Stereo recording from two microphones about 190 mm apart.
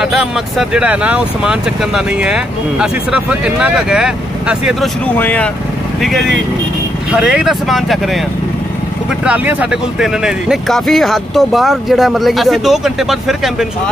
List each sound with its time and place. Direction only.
0.0 s speech: 5° right (ahead or behind)
5.0 s speech: 10° left (ahead or behind)
9.2 s speech: 10° right (ahead or behind)